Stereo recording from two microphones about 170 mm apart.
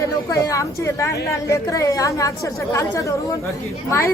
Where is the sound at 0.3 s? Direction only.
20° left (ahead or behind).